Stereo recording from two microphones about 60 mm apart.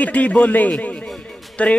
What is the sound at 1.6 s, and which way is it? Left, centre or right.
Speech, left.